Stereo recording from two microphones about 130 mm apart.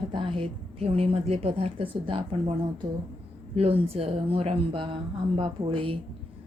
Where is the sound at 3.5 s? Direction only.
50° right (ahead or behind).